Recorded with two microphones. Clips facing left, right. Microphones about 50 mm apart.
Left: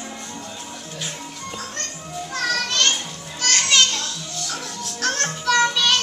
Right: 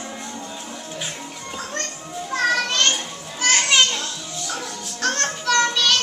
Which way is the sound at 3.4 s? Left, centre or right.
Centre.